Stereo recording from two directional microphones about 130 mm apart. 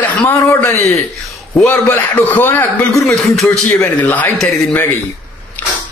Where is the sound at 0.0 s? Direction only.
15° left (ahead or behind).